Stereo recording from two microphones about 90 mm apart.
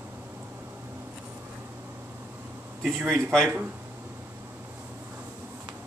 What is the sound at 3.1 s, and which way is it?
Speech, 5° left (ahead or behind).